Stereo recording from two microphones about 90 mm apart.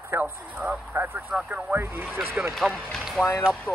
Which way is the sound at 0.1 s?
15° right (ahead or behind).